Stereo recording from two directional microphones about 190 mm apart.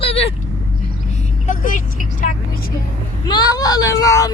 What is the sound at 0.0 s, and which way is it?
Vehicle, 30° left (ahead or behind).